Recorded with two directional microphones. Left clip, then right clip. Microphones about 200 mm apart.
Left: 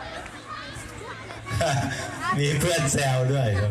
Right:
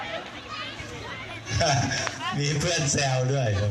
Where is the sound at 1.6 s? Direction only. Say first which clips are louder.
Right 2 dB; 50° left (ahead or behind).